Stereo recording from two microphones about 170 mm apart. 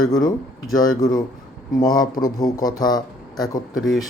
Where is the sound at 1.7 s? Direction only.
20° left (ahead or behind).